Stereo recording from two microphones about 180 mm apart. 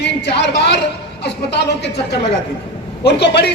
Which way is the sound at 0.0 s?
70° left (ahead or behind).